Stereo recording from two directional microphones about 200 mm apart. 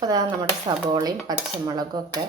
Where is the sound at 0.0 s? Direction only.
20° right (ahead or behind).